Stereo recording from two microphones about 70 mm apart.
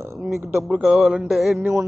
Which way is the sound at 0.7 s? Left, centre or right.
Centre.